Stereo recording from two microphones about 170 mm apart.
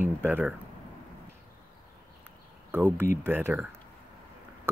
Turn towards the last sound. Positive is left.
turn(degrees=-15)  # may be behind; listen again after turning